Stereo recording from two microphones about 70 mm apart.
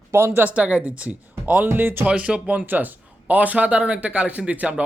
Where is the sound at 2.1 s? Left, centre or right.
Centre.